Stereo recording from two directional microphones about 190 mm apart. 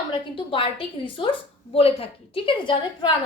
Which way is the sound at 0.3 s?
30° left (ahead or behind).